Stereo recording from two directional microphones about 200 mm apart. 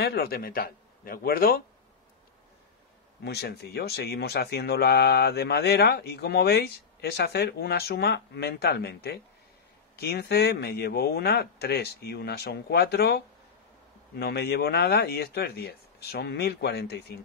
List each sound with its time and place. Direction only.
0.0 s speech: 50° left (ahead or behind)
3.3 s speech: 55° left (ahead or behind)